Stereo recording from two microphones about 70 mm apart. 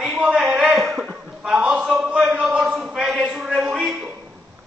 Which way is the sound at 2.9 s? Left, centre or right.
Centre.